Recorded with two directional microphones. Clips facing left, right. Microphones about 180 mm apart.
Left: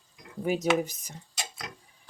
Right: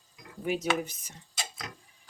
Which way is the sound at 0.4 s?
40° left (ahead or behind).